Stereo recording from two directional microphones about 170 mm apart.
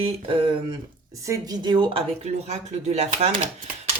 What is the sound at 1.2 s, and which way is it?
Speech, 20° right (ahead or behind).